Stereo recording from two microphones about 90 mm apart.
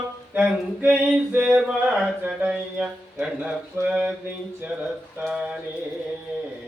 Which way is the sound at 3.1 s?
15° right (ahead or behind).